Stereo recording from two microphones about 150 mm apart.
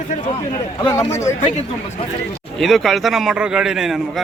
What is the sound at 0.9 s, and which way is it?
Speech, 20° left (ahead or behind).